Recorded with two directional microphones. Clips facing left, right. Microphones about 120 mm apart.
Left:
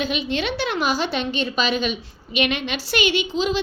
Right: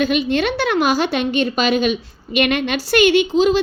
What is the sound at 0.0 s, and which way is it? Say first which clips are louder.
A woman's voice: right 7 dB; 50° right (ahead or behind).